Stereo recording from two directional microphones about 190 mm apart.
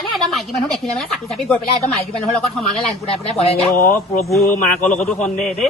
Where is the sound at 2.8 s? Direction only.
30° left (ahead or behind).